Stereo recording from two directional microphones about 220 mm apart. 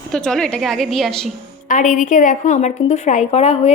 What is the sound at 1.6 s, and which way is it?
A woman's voice, 35° left (ahead or behind).